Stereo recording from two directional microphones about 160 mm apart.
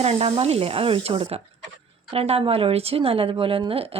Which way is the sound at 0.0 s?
40° right (ahead or behind).